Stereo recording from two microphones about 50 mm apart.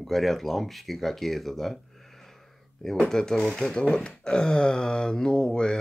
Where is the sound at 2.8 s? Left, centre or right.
Centre.